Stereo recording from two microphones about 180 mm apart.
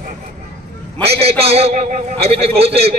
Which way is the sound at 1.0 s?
35° right (ahead or behind).